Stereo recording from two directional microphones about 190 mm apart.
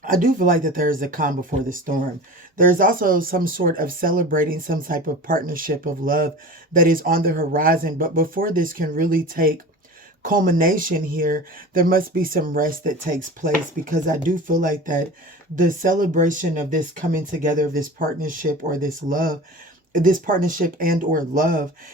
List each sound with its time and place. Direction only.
0.0 s speech: 45° right (ahead or behind)